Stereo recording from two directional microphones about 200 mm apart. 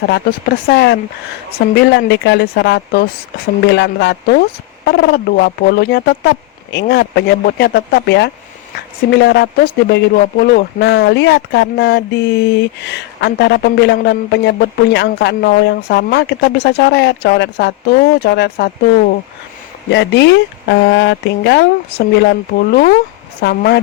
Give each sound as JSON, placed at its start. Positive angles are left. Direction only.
{"t": 0.7, "sound": "speech", "side_deg": 55}
{"t": 19.9, "sound": "speech", "side_deg": 60}